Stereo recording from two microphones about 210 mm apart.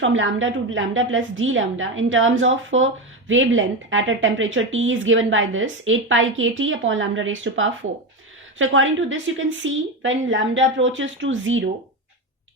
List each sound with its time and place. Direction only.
0.0 s a woman's voice: 65° right (ahead or behind)